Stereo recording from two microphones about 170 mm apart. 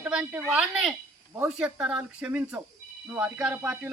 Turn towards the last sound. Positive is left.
turn(degrees=-5)  # may be behind; listen again after turning